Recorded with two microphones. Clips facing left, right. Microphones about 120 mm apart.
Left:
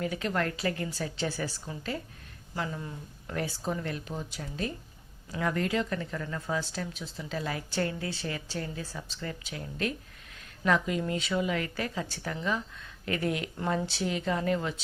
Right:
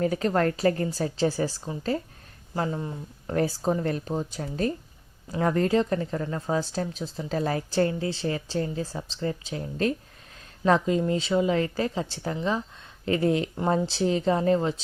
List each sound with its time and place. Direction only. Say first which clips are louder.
0.0 s a woman's voice: right 7 dB; 40° right (ahead or behind)